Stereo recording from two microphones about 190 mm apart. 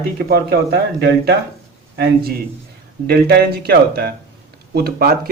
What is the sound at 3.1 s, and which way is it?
Speech, 55° right (ahead or behind).